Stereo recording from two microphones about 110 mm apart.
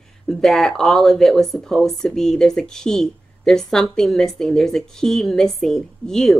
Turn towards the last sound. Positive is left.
turn(degrees=5)  # may be behind; listen again after turning